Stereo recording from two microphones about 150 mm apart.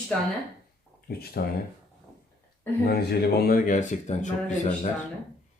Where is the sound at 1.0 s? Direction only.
90° left.